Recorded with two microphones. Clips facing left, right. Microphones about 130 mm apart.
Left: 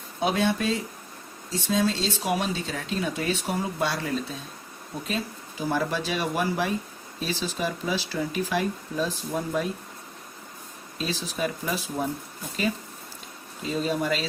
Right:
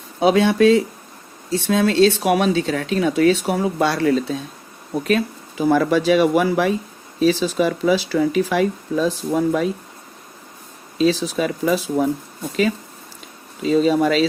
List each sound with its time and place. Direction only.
0.2 s speech: 90° right
1.5 s speech: 70° right (ahead or behind); by 9.6 s 90° right
10.9 s speech: 90° right
13.6 s speech: 90° right